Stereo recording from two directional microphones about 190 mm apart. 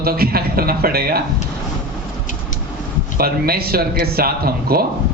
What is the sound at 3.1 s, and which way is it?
A man's voice, 50° right (ahead or behind).